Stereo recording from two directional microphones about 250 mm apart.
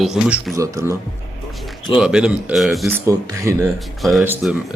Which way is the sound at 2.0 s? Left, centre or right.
Centre.